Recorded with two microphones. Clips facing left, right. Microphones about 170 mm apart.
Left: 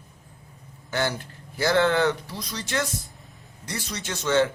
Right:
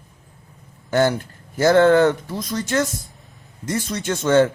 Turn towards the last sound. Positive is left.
turn(degrees=-50)  # may be behind; listen again after turning